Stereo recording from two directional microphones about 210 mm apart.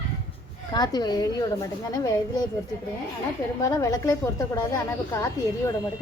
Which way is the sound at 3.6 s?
15° left (ahead or behind).